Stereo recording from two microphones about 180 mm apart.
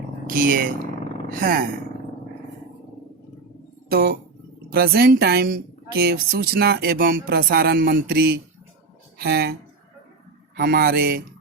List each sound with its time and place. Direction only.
0.3 s speech: 50° right (ahead or behind)
3.8 s a woman's voice: 60° right (ahead or behind)
10.6 s a woman's voice: 55° right (ahead or behind)